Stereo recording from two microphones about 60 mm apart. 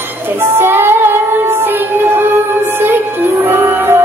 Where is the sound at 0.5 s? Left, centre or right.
Right.